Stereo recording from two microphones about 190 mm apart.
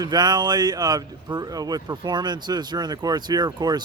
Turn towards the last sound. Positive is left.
turn(degrees=-20)  # may be behind; listen again after turning